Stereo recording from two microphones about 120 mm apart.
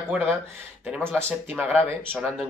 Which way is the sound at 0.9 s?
20° right (ahead or behind).